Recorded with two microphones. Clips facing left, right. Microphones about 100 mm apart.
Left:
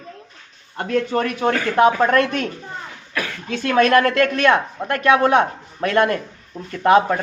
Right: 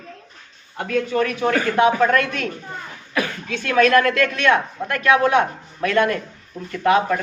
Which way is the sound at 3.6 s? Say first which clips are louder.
Left 1 dB; 45° left (ahead or behind).